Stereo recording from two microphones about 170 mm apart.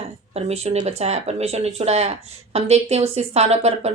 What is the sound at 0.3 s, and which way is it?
Speech, 35° right (ahead or behind).